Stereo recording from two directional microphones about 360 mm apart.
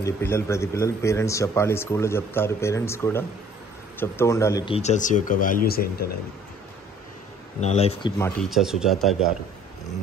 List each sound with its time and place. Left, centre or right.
0.0 s a man's voice: centre; by 6.0 s left
7.6 s a man's voice: centre
8.2 s speech: centre